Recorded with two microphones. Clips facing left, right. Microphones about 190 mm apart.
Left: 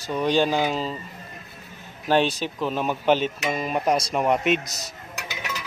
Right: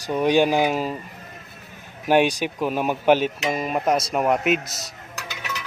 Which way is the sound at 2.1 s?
15° right (ahead or behind).